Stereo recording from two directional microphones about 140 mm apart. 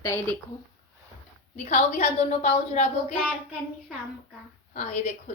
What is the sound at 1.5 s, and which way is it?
A woman's voice, 50° left (ahead or behind).